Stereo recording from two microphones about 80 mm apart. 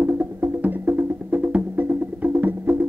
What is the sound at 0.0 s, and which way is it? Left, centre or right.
Music, right.